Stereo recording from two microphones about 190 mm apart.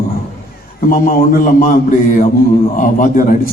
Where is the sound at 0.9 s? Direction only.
45° left (ahead or behind).